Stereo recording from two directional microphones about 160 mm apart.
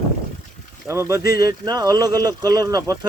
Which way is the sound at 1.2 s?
75° left (ahead or behind).